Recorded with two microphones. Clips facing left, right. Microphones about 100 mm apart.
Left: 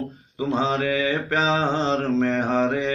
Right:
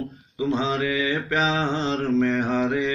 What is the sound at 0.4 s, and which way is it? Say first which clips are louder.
Mantra: left 1 dB; 35° left (ahead or behind).